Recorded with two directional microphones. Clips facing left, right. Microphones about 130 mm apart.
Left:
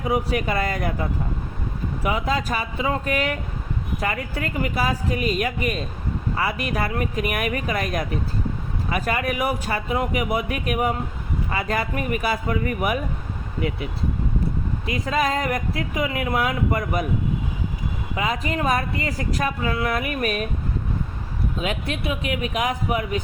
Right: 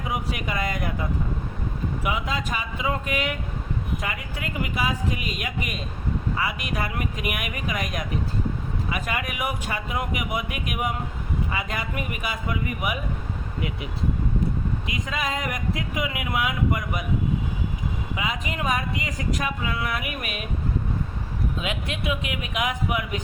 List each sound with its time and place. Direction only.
0.0 s speech: 35° left (ahead or behind)
2.0 s speech: 35° left (ahead or behind)
14.8 s speech: 40° left (ahead or behind)
18.2 s speech: 40° left (ahead or behind)
21.6 s speech: 40° left (ahead or behind)